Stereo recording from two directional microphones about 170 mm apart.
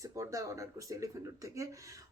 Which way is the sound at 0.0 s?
20° right (ahead or behind).